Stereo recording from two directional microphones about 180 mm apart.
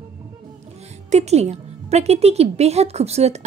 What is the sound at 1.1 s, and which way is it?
A woman's voice, 35° right (ahead or behind).